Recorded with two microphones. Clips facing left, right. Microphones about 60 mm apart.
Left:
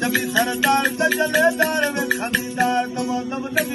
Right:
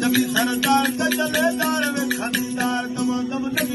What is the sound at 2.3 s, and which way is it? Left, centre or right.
Speech, left.